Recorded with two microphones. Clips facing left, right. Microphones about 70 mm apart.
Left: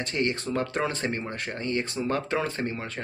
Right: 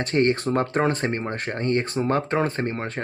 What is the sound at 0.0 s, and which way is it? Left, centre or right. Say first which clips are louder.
Speech: right 7 dB; right.